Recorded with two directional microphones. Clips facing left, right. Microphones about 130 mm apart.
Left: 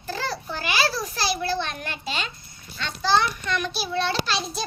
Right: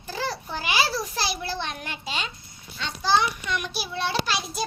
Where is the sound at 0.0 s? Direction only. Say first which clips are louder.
Left 1 dB; 15° right (ahead or behind).